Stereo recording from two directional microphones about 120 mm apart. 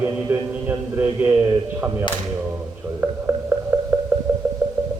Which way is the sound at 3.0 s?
20° right (ahead or behind).